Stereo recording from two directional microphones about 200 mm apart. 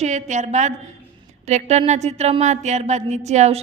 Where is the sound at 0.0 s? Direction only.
35° right (ahead or behind).